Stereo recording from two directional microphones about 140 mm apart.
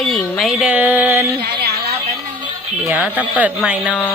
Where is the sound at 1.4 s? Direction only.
90° right.